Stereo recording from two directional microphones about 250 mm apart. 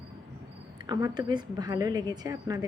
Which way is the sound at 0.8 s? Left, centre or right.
Centre.